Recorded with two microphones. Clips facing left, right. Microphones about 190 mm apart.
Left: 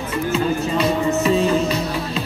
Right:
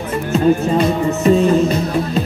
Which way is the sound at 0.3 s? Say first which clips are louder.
Right 7 dB; 45° right (ahead or behind).